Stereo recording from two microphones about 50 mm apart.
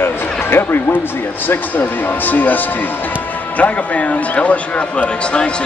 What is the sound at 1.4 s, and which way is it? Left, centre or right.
A man's voice, left.